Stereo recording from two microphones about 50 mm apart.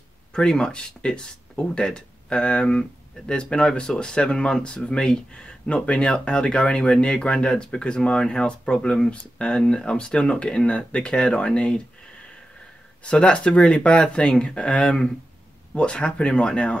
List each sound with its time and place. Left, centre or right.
0.3 s speech: centre
13.0 s speech: left